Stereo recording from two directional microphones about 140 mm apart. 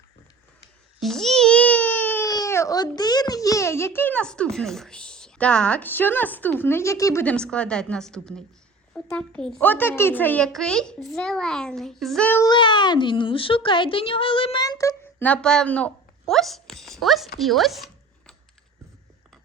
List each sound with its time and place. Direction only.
0.9 s a sound: centre (ahead or behind)
2.2 s a child's voice: 25° left (ahead or behind)
12.5 s speech: 35° left (ahead or behind)
15.2 s speech: 10° left (ahead or behind)